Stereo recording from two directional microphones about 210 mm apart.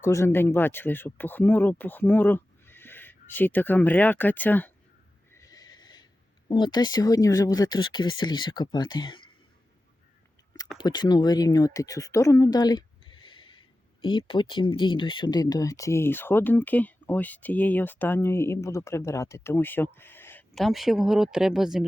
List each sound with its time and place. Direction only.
0.0 s speech: 15° left (ahead or behind)
5.3 s snort: 15° left (ahead or behind)
6.5 s speech: 20° left (ahead or behind)
10.8 s speech: 20° left (ahead or behind); by 21.8 s centre (ahead or behind)